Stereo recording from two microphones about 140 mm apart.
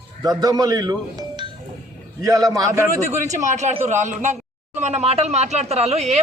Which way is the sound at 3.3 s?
55° right (ahead or behind).